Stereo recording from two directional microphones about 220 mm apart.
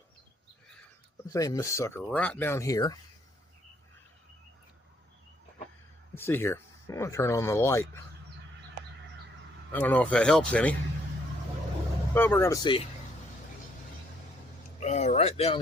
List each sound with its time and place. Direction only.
1.3 s speech: 15° left (ahead or behind)
6.1 s speech: 10° left (ahead or behind)
9.7 s speech: 5° left (ahead or behind)
12.1 s speech: 10° left (ahead or behind)
14.8 s speech: 30° left (ahead or behind)